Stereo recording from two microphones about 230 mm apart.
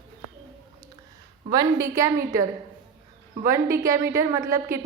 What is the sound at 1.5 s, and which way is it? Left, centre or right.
Speech, centre.